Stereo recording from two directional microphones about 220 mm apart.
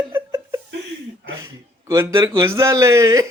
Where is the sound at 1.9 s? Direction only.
15° right (ahead or behind).